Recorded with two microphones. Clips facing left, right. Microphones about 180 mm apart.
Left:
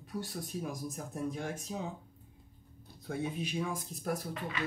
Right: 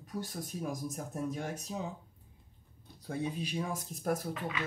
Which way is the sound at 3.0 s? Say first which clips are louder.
Even; 35° right (ahead or behind).